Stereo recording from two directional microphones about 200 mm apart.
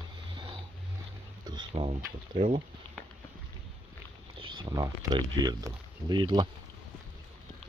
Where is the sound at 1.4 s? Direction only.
20° right (ahead or behind).